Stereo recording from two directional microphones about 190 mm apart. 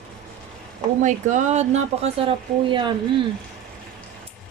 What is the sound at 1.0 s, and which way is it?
Speech, 40° right (ahead or behind).